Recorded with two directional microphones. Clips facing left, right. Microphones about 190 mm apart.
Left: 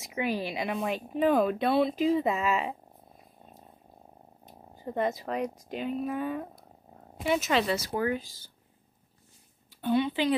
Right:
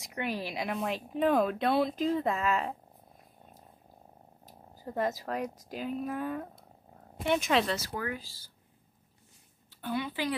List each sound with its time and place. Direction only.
0.0 s speech: centre (ahead or behind)
4.5 s speech: centre (ahead or behind)
7.8 s speech: 25° left (ahead or behind)
9.8 s a woman's voice: 25° left (ahead or behind)